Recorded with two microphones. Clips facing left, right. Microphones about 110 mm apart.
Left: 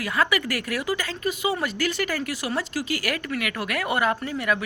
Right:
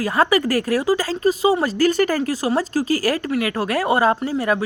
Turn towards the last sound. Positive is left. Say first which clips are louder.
# right 6 dB
turn(degrees=-35)  # may be behind; listen again after turning